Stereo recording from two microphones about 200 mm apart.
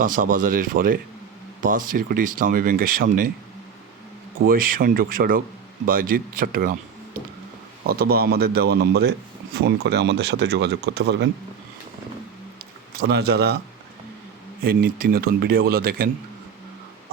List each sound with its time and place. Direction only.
0.0 s speech: 45° right (ahead or behind)
4.4 s speech: 45° right (ahead or behind)
12.9 s speech: 55° right (ahead or behind)
14.6 s speech: 50° right (ahead or behind)